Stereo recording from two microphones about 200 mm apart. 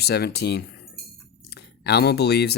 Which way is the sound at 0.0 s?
55° left (ahead or behind).